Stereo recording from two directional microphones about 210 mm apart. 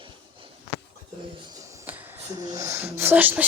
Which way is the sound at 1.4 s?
15° right (ahead or behind).